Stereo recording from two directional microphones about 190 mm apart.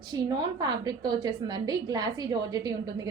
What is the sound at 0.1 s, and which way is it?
A woman's voice, 20° right (ahead or behind).